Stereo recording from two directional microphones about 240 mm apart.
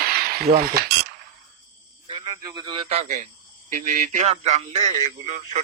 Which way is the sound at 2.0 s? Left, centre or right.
Right.